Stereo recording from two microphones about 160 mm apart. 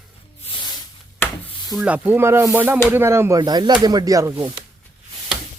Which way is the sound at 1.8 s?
10° right (ahead or behind).